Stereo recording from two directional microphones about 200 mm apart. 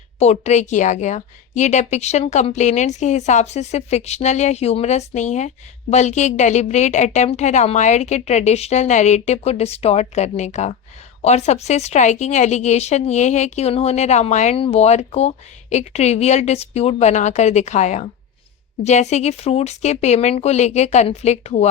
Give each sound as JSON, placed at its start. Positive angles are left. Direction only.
{"t": 0.2, "sound": "a woman's voice", "side_deg": 35}